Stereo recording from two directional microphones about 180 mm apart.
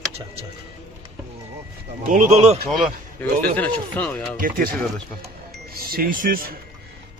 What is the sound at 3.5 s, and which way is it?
Speech, 10° left (ahead or behind).